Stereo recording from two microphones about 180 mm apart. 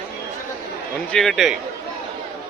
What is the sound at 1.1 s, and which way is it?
Speech, centre (ahead or behind).